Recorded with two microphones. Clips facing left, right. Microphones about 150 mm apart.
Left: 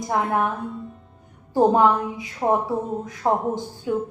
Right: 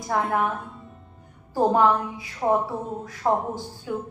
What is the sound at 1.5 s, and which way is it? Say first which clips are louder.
A woman's voice: left 3 dB; 20° left (ahead or behind).